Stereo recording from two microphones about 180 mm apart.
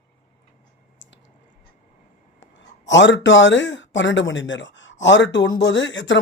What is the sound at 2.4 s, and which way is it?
Speech, 85° left.